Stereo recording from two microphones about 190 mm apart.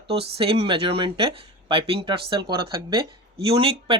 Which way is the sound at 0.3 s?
30° right (ahead or behind).